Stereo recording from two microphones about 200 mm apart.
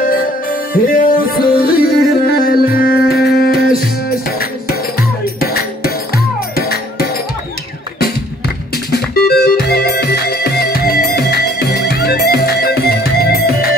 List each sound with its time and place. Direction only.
0.0 s music: 45° left (ahead or behind)
8.9 s music: 55° left (ahead or behind)